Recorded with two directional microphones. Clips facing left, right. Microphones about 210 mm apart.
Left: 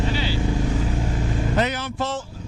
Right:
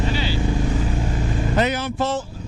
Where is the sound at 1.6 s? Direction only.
5° right (ahead or behind).